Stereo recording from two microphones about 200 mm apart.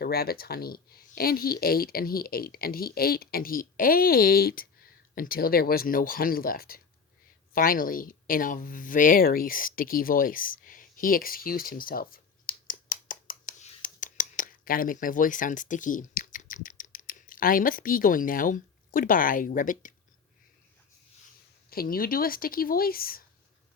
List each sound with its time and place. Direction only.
0.0 s speech: 50° left (ahead or behind)
21.7 s speech: 50° left (ahead or behind)